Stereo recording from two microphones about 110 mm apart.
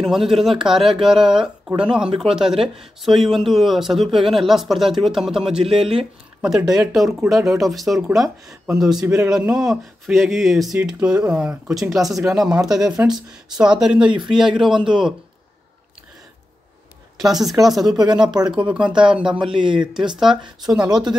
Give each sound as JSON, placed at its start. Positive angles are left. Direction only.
{"t": 0.0, "sound": "speech", "side_deg": 0}
{"t": 6.7, "sound": "speech", "side_deg": -5}
{"t": 9.0, "sound": "a man's voice", "side_deg": -20}
{"t": 9.3, "sound": "speech", "side_deg": -5}
{"t": 17.2, "sound": "speech", "side_deg": -5}
{"t": 19.6, "sound": "speech", "side_deg": -45}
{"t": 20.6, "sound": "speech", "side_deg": -5}